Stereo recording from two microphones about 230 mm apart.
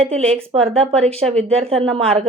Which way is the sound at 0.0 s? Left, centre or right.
Right.